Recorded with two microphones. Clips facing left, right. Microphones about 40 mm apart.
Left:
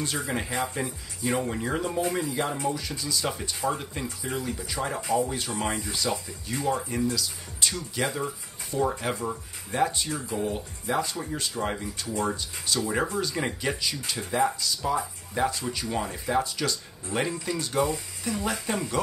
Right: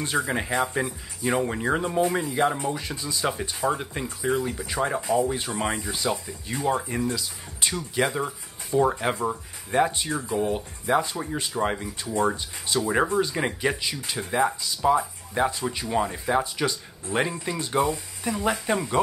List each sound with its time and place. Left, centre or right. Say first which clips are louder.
0.0 s speech: right 4 dB; right
6.4 s speech: right 3 dB; right